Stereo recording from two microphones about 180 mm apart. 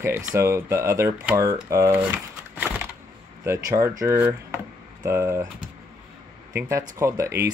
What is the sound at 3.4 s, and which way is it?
Speech, 15° right (ahead or behind).